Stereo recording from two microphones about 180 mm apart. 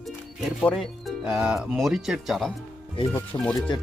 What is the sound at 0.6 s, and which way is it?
Speech, centre (ahead or behind).